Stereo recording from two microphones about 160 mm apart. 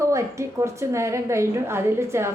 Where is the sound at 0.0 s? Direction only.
20° right (ahead or behind).